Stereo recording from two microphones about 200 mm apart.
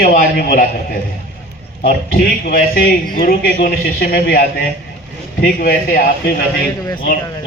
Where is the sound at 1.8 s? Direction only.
50° left (ahead or behind).